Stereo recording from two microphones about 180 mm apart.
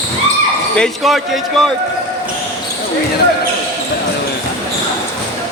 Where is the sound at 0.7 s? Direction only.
Centre (ahead or behind).